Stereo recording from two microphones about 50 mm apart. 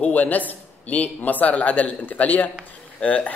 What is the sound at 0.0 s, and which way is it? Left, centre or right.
Speech, left.